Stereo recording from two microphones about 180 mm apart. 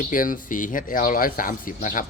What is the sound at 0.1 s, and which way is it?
Speech, 50° left (ahead or behind).